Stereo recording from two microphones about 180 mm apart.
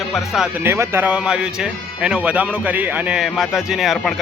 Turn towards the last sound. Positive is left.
turn(degrees=0)  # may be behind; listen again after turning